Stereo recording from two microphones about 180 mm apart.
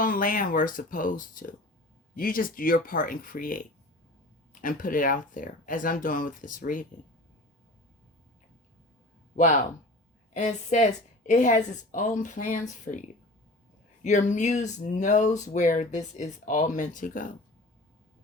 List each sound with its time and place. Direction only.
0.0 s a woman's voice: 50° left (ahead or behind)
9.3 s a woman's voice: 45° left (ahead or behind)